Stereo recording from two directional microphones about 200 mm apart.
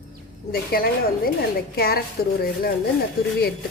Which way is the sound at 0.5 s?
50° left (ahead or behind).